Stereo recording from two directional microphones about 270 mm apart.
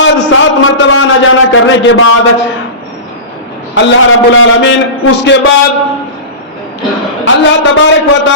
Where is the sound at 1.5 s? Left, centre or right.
Left.